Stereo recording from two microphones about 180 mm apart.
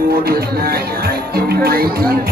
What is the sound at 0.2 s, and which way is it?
Music, 60° right (ahead or behind).